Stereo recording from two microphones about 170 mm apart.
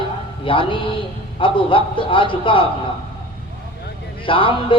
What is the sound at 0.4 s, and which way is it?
A man's voice, 30° left (ahead or behind).